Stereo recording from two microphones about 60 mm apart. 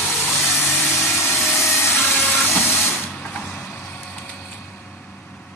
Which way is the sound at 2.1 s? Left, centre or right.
Left.